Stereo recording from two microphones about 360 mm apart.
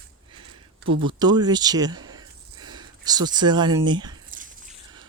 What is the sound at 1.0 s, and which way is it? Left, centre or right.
Speech, centre.